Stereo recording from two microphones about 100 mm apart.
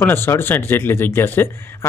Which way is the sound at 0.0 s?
25° left (ahead or behind).